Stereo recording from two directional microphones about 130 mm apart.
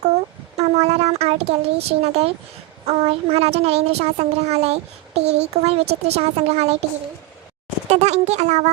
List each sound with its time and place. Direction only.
0.5 s a child's voice: 55° right (ahead or behind)
7.9 s a child's voice: 60° right (ahead or behind)